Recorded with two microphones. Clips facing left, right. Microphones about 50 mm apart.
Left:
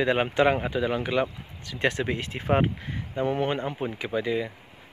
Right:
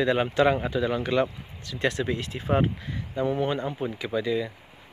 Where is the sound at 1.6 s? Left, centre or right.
Left.